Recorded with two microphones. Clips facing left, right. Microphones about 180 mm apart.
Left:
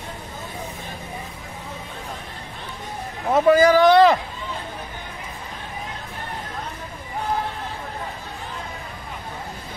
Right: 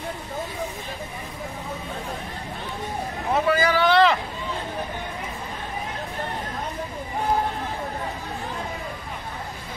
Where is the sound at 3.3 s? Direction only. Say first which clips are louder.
Left 7 dB; 45° left (ahead or behind).